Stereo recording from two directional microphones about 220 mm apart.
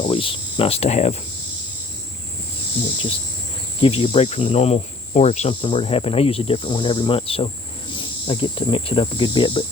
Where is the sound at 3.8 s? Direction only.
25° left (ahead or behind).